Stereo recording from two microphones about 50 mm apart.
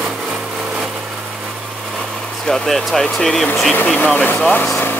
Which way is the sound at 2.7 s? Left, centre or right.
Centre.